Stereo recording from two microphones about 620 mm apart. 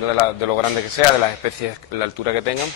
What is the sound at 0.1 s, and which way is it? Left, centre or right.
Speech, left.